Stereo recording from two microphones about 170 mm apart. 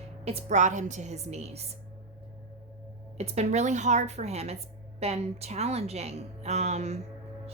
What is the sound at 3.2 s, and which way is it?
A woman's voice, 40° right (ahead or behind).